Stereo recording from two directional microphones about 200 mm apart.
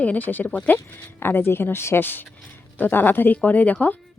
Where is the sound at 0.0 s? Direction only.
10° left (ahead or behind).